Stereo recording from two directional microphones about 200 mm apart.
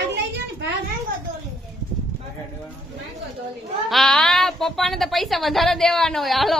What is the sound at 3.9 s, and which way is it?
A woman's voice, 5° left (ahead or behind).